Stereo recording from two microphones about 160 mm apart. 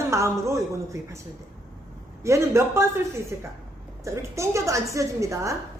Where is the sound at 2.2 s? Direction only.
15° right (ahead or behind).